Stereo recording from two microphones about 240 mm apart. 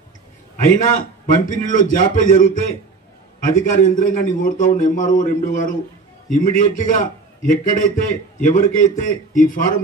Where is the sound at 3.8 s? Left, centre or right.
Left.